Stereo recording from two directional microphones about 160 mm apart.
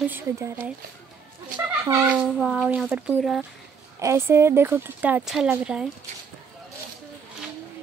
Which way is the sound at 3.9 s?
15° right (ahead or behind).